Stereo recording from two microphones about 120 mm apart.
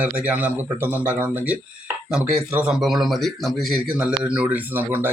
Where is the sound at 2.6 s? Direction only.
Centre (ahead or behind).